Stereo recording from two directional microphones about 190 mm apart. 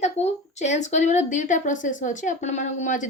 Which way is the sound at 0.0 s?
35° left (ahead or behind).